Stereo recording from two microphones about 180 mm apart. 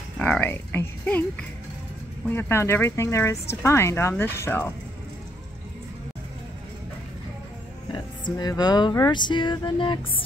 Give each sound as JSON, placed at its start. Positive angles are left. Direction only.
{"t": 0.2, "sound": "speech", "side_deg": 10}
{"t": 2.3, "sound": "speech", "side_deg": 15}
{"t": 7.9, "sound": "speech", "side_deg": 25}